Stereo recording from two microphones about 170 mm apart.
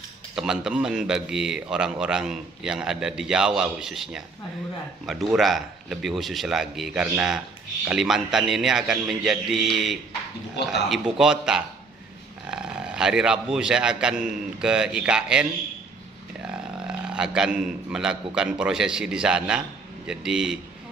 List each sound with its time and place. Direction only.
0.4 s a man's voice: 5° right (ahead or behind)
16.4 s a man's voice: 5° right (ahead or behind)